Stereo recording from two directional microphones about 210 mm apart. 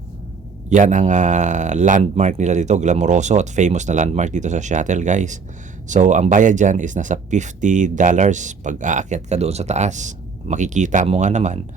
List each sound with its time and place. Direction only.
0.7 s speech: 35° right (ahead or behind)